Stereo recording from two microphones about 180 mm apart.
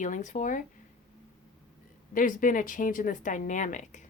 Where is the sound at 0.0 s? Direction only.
45° left (ahead or behind).